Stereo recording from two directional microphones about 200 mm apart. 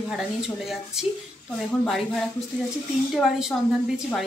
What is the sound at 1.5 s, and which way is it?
Speech, centre (ahead or behind).